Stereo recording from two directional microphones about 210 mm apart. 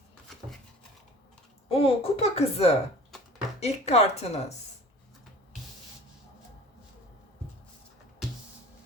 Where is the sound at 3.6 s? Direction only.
30° left (ahead or behind).